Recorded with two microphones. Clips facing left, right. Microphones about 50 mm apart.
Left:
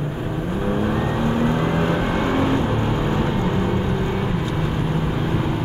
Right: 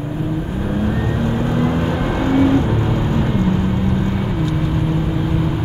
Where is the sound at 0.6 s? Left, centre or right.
Centre.